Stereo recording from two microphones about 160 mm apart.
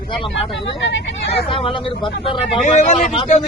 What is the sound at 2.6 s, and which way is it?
Speech, 50° left (ahead or behind).